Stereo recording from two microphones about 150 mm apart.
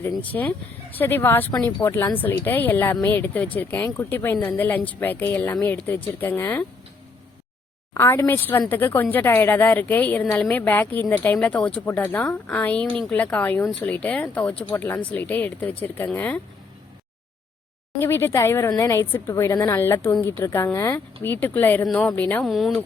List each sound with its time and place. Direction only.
0.2 s speech: 10° left (ahead or behind)
7.9 s speech: 20° left (ahead or behind)
10.2 s speech: centre (ahead or behind)
10.5 s speech: 15° left (ahead or behind)
18.0 s speech: 15° left (ahead or behind); by 22.8 s centre (ahead or behind)